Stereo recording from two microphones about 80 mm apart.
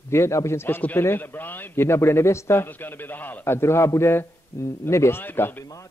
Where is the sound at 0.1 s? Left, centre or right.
Left.